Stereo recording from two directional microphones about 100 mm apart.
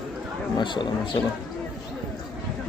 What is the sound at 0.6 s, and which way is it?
Speech, 55° left (ahead or behind).